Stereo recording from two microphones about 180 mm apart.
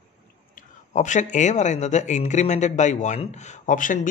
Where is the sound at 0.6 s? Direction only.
40° left (ahead or behind).